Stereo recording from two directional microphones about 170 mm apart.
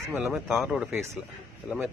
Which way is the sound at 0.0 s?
15° right (ahead or behind).